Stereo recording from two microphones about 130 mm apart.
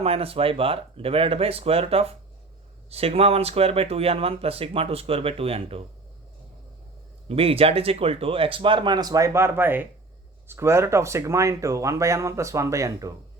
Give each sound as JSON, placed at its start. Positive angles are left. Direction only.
{"t": 0.0, "sound": "speech", "side_deg": -50}
{"t": 7.3, "sound": "speech", "side_deg": -50}